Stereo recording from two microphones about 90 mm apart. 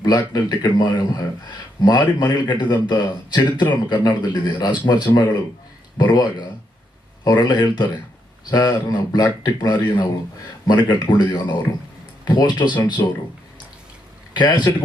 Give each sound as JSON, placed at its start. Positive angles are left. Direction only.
{"t": 0.0, "sound": "a man's voice", "side_deg": 45}
{"t": 14.3, "sound": "a man's voice", "side_deg": 55}